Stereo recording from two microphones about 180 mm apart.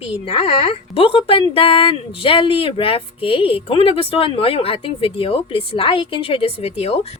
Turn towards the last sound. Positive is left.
turn(degrees=35)  # may be behind; listen again after turning